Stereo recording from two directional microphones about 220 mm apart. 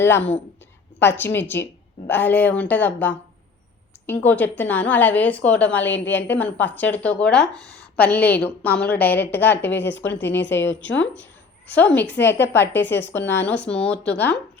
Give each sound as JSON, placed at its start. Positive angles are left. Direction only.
{"t": 0.0, "sound": "a woman's voice", "side_deg": 10}
{"t": 10.1, "sound": "a woman's voice", "side_deg": 50}
{"t": 10.3, "sound": "a woman's voice", "side_deg": 10}
{"t": 11.7, "sound": "a woman's voice", "side_deg": 10}